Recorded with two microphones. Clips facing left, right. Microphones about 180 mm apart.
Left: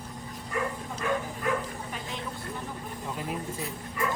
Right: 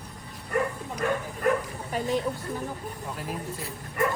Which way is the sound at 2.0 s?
40° right (ahead or behind).